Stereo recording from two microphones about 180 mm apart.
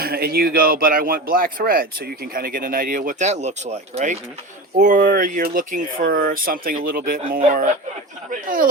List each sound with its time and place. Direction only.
0.0 s speech: 60° right (ahead or behind)